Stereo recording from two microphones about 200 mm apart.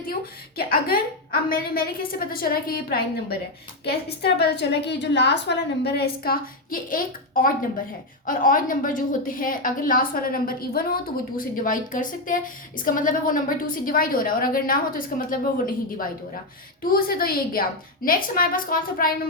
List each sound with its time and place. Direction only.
0.0 s a woman's voice: 45° left (ahead or behind)